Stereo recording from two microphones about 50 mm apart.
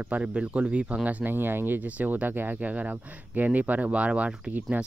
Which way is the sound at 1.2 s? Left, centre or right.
Right.